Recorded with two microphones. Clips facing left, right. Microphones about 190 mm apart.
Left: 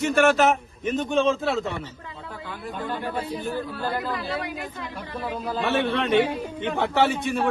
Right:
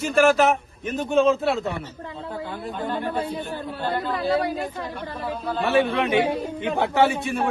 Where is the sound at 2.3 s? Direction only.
25° right (ahead or behind).